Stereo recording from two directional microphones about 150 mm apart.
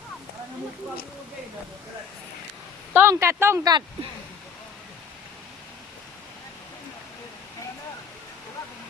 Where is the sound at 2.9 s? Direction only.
15° right (ahead or behind).